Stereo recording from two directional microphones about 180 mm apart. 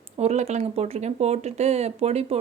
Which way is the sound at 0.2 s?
40° right (ahead or behind).